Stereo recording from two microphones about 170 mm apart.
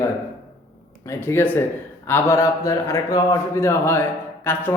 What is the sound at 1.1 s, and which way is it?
A man's voice, 15° left (ahead or behind).